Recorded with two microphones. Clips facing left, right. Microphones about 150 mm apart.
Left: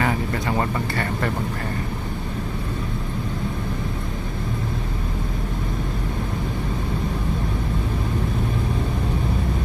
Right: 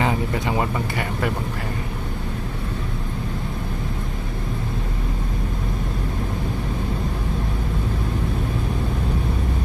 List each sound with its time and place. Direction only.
0.0 s speech: 15° right (ahead or behind)